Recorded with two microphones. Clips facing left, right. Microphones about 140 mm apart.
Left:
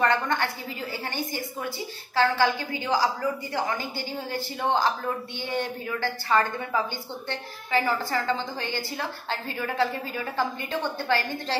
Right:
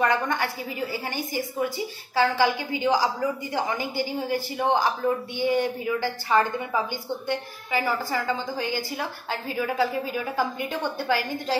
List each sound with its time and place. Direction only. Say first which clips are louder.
0.0 s a woman's voice: even; 10° right (ahead or behind)